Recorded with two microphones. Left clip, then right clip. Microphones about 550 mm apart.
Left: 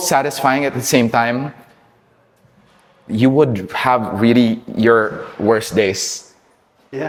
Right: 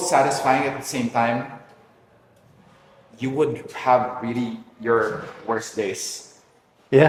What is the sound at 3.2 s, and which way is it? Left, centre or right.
Speech, left.